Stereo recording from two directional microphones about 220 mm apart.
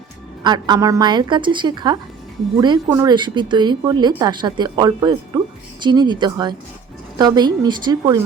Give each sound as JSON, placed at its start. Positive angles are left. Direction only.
{"t": 0.4, "sound": "a woman's voice", "side_deg": -20}